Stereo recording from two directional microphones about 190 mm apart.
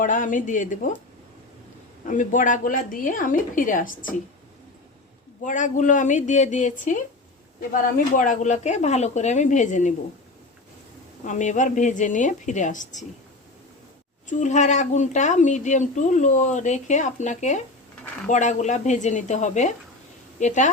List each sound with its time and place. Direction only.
0.0 s a woman's voice: 40° left (ahead or behind)
2.0 s a woman's voice: 40° left (ahead or behind)
5.4 s a woman's voice: 40° left (ahead or behind)
11.3 s a woman's voice: 40° left (ahead or behind)
14.3 s a woman's voice: 40° left (ahead or behind)